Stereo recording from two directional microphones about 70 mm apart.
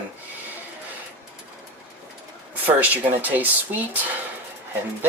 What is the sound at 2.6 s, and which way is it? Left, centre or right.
Speech, right.